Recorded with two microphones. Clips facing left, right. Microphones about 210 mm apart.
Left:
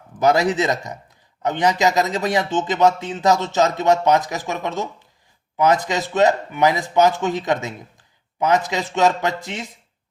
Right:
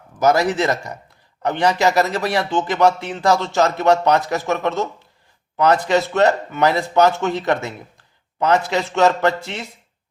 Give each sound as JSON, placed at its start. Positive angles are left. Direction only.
{"t": 0.2, "sound": "a man's voice", "side_deg": 20}